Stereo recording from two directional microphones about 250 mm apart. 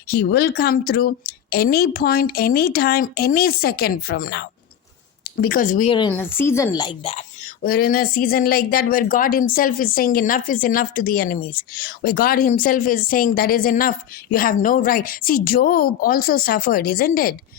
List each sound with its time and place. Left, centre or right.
0.1 s speech: left
6.1 s speech: centre
7.6 s speech: left